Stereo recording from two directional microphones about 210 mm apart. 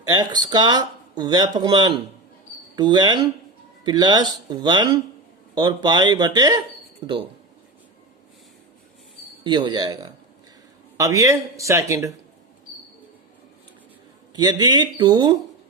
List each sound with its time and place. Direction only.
0.1 s speech: 20° right (ahead or behind)
9.4 s a man's voice: 20° right (ahead or behind)
14.3 s speech: 20° right (ahead or behind)